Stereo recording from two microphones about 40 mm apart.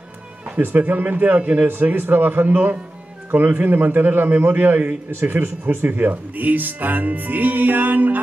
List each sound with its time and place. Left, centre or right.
0.6 s a man's voice: right
3.3 s a man's voice: right